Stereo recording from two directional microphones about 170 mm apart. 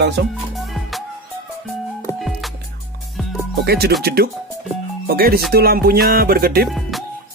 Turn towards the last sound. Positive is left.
turn(degrees=-65)  # may be behind; listen again after turning